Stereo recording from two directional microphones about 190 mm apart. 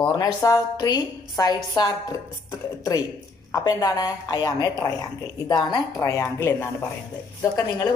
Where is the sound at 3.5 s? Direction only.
20° left (ahead or behind).